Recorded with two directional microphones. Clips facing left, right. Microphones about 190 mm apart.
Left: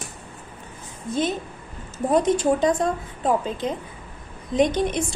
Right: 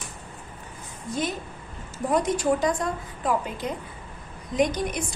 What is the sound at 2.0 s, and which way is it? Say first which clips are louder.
A woman's voice: left 4 dB; 25° left (ahead or behind).